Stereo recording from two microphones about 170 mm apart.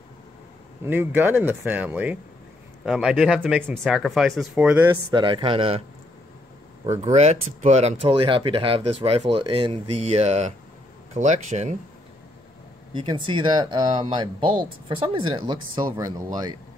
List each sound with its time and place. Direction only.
0.8 s speech: 10° right (ahead or behind)
5.1 s speech: 30° right (ahead or behind)
7.2 s speech: 40° right (ahead or behind)
12.9 s speech: 30° right (ahead or behind)